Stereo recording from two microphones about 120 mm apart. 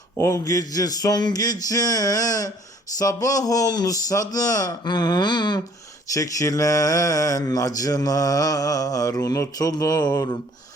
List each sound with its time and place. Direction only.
0.2 s speech: 25° left (ahead or behind)